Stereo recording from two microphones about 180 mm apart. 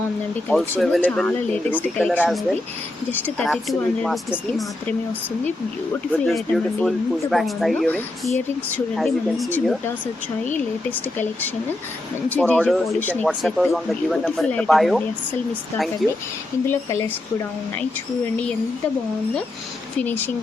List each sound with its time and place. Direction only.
0.4 s speech: 5° left (ahead or behind)
6.1 s speech: 5° left (ahead or behind)
12.3 s speech: 5° left (ahead or behind)
16.0 s speech: centre (ahead or behind)
16.6 s speech: 15° left (ahead or behind)
20.0 s speech: 10° left (ahead or behind)